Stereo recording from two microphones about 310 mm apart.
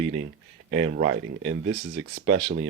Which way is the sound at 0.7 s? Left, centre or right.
Right.